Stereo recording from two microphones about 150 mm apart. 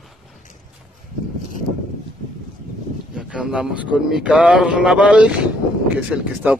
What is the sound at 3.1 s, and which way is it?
Speech, 5° right (ahead or behind).